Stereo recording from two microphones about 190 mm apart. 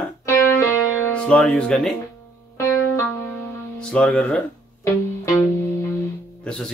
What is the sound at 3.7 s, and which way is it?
Speech, 5° left (ahead or behind).